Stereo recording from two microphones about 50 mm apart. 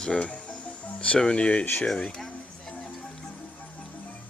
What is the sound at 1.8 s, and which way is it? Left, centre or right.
Speech, centre.